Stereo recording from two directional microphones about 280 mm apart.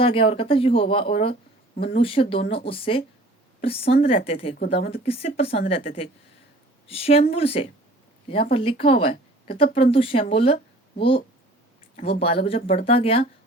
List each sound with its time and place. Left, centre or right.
0.0 s speech: centre